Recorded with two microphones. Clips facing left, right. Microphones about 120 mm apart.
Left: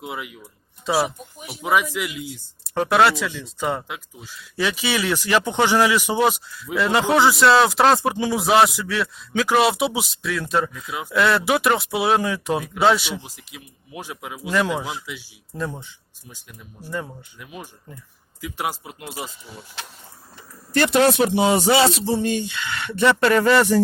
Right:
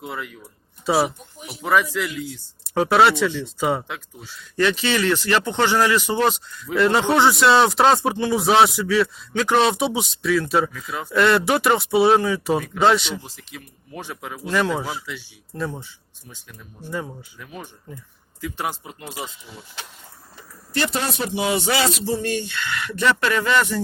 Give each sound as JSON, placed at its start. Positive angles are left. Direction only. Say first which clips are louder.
{"t": 0.0, "sound": "a man's voice", "louder": "even", "side_deg": 15}
{"t": 0.9, "sound": "speech", "louder": "right 2 dB", "side_deg": 0}
{"t": 1.6, "sound": "a man's voice", "louder": "right 1 dB", "side_deg": 15}
{"t": 2.7, "sound": "a man's voice", "louder": "right 1 dB", "side_deg": -5}
{"t": 15.6, "sound": "speech", "louder": "right 1 dB", "side_deg": 0}
{"t": 16.3, "sound": "a man's voice", "louder": "even", "side_deg": 10}
{"t": 20.7, "sound": "speech", "louder": "left 7 dB", "side_deg": 60}
{"t": 21.4, "sound": "music", "louder": "left 1 dB", "side_deg": 45}
{"t": 21.7, "sound": "music", "louder": "left 4 dB", "side_deg": 25}
{"t": 22.8, "sound": "speech", "louder": "left 3 dB", "side_deg": 25}